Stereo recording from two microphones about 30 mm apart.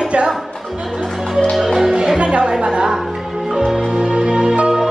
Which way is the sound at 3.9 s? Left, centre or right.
Right.